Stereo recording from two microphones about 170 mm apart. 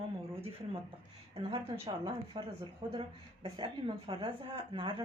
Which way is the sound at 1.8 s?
20° right (ahead or behind).